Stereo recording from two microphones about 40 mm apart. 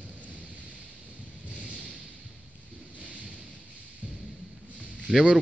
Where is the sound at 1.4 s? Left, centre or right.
Right.